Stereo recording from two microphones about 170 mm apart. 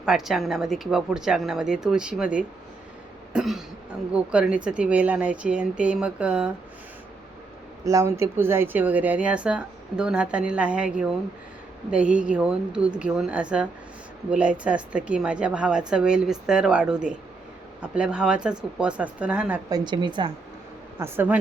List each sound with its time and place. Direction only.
0.0 s a woman's voice: 5° right (ahead or behind)
7.9 s a woman's voice: 15° right (ahead or behind)
19.7 s a woman's voice: 25° right (ahead or behind)
21.0 s a woman's voice: 10° right (ahead or behind)